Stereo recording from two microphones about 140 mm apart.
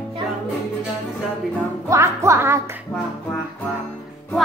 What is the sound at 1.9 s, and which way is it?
Music, 20° right (ahead or behind).